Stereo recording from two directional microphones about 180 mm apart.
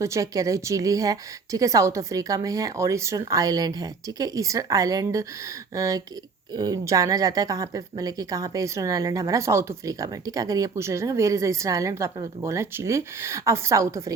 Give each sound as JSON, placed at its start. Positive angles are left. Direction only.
{"t": 0.0, "sound": "a woman's voice", "side_deg": -15}